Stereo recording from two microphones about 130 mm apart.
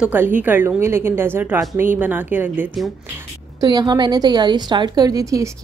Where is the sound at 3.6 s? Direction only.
30° right (ahead or behind).